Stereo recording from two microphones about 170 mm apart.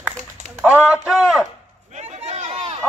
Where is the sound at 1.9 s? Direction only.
40° right (ahead or behind).